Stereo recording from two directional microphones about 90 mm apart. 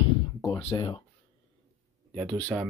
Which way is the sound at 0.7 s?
40° left (ahead or behind).